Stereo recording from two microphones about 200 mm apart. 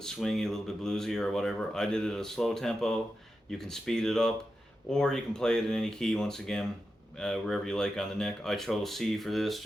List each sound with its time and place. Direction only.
0.0 s speech: centre (ahead or behind)